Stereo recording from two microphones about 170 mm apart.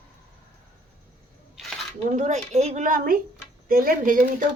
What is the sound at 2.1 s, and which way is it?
A woman's voice, 45° right (ahead or behind).